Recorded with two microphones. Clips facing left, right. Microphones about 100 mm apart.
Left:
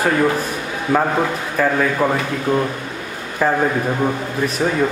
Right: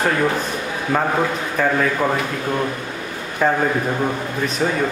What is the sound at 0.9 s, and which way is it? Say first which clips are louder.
A man's voice: left 2 dB; 5° left (ahead or behind).